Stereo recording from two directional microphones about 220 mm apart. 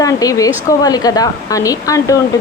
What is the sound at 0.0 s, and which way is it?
Speech, 15° left (ahead or behind).